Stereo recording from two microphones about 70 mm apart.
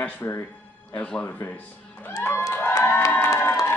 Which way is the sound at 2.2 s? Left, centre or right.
Left.